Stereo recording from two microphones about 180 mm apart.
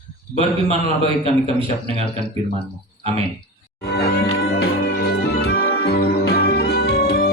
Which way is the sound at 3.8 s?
60° left (ahead or behind).